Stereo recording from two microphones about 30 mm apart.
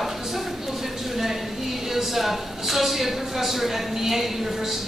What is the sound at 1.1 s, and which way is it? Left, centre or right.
A woman's voice, centre.